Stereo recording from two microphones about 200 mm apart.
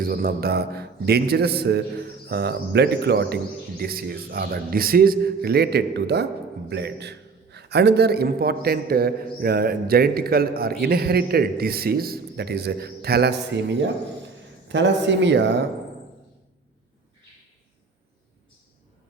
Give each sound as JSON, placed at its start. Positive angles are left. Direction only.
{"t": 0.0, "sound": "a man's voice", "side_deg": -45}